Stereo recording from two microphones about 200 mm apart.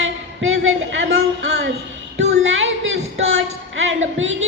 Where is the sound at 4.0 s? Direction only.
75° right (ahead or behind).